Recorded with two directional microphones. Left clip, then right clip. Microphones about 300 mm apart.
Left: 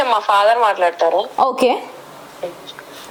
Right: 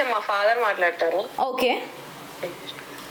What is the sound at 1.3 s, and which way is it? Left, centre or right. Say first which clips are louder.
Speech: left 8 dB; left.